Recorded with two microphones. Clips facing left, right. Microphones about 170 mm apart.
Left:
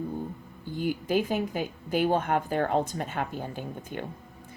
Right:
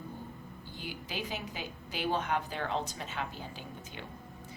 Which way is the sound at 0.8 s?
50° left (ahead or behind).